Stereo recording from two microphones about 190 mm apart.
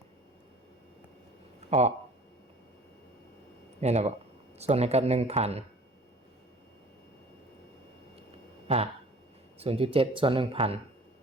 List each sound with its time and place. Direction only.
3.8 s speech: 35° right (ahead or behind)
8.6 s speech: 30° right (ahead or behind)